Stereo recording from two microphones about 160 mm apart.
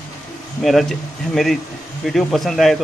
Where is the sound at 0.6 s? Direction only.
Centre (ahead or behind).